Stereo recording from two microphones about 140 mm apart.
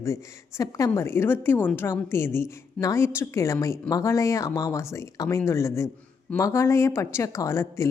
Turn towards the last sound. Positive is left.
turn(degrees=20)  # may be behind; listen again after turning